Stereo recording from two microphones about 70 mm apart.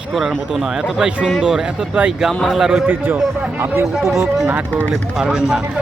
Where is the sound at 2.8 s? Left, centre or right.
Right.